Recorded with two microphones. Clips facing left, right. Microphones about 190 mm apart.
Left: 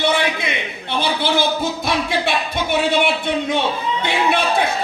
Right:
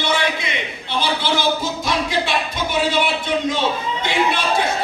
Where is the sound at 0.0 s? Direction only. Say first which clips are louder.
Left 2 dB; 55° left (ahead or behind).